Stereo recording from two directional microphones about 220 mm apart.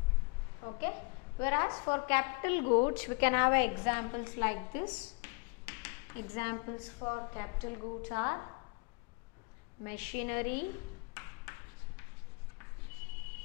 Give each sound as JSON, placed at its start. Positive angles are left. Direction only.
{"t": 1.4, "sound": "a woman's voice", "side_deg": 15}
{"t": 9.8, "sound": "a woman's voice", "side_deg": 10}